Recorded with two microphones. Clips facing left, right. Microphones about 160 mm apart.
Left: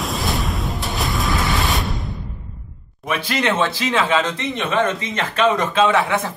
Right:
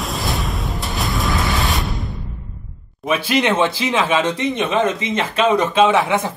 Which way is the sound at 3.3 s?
15° right (ahead or behind).